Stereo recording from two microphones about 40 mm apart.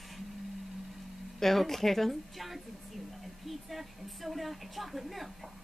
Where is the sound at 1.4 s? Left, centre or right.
Centre.